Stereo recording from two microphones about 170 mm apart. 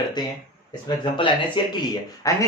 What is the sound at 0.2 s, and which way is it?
Speech, 25° left (ahead or behind).